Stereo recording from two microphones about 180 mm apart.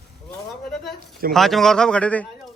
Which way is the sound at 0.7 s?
Centre (ahead or behind).